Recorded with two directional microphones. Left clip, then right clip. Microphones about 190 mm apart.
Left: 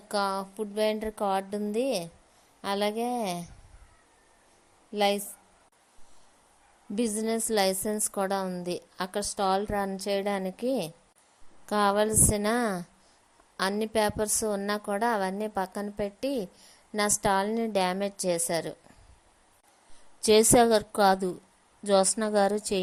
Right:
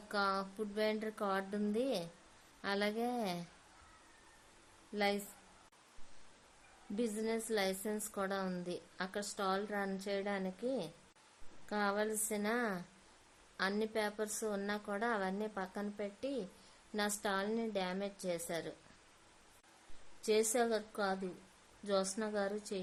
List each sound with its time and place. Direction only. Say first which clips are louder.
0.1 s music: left 7 dB; 30° left (ahead or behind)
4.9 s music: left 10 dB; 30° left (ahead or behind)
6.9 s a woman's voice: left 9 dB; 35° left (ahead or behind)
20.2 s a woman's voice: left 13 dB; 35° left (ahead or behind)